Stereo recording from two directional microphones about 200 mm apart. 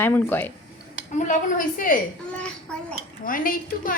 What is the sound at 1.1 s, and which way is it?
Speech, 40° left (ahead or behind).